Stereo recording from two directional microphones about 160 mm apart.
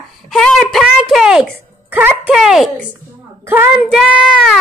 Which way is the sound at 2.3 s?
Centre (ahead or behind).